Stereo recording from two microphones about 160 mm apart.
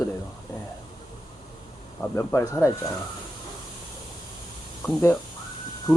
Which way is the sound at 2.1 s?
15° left (ahead or behind).